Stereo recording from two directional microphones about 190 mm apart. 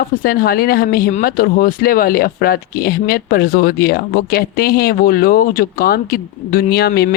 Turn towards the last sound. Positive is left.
turn(degrees=55)  # may be behind; listen again after turning